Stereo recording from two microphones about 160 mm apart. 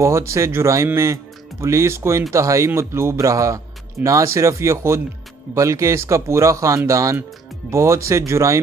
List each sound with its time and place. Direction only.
0.0 s a man's voice: 15° right (ahead or behind)